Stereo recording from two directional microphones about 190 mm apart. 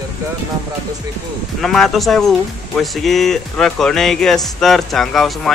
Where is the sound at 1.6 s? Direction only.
Centre (ahead or behind).